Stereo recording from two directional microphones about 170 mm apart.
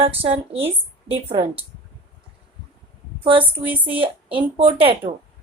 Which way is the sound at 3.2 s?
30° right (ahead or behind).